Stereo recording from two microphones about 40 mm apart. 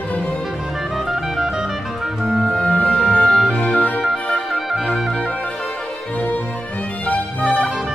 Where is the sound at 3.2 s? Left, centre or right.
Centre.